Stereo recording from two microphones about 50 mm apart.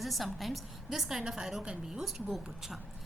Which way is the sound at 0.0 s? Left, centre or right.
Centre.